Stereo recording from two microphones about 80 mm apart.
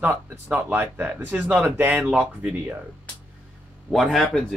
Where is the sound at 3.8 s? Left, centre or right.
Centre.